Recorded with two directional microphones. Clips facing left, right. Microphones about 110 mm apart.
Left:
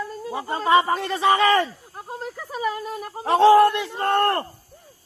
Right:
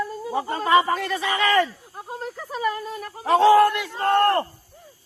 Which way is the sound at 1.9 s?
Centre (ahead or behind).